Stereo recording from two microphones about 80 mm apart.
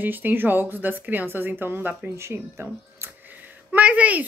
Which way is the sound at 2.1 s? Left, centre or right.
Right.